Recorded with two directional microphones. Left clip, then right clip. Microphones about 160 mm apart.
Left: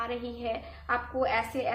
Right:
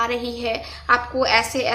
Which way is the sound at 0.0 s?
30° right (ahead or behind).